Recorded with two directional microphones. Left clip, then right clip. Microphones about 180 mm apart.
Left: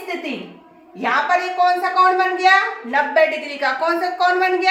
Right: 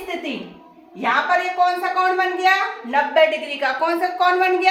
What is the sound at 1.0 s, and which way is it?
A woman's voice, centre (ahead or behind).